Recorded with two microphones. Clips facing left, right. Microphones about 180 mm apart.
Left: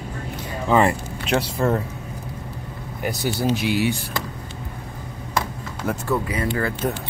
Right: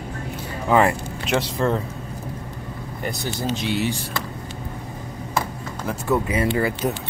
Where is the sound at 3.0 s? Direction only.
5° left (ahead or behind).